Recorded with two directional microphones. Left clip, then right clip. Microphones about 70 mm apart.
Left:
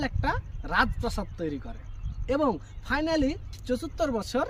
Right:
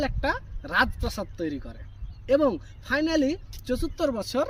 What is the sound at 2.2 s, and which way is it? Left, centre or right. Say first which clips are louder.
A woman's voice: right 4 dB; left.